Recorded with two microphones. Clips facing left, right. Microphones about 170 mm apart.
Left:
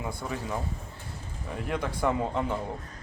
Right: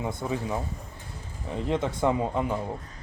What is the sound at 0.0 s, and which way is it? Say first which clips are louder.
Speech: right 4 dB; 20° right (ahead or behind).